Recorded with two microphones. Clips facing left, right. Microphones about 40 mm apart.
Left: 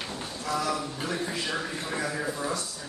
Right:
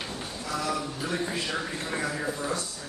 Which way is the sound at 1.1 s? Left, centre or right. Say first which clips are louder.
Right 2 dB; centre.